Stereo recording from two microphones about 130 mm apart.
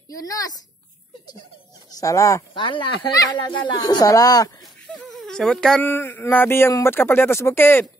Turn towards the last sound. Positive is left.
turn(degrees=15)  # may be behind; listen again after turning